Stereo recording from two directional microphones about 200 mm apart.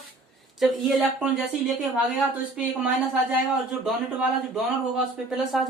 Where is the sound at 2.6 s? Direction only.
Centre (ahead or behind).